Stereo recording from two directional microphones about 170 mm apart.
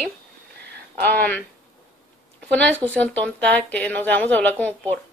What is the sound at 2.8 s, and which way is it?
Speech, 10° left (ahead or behind).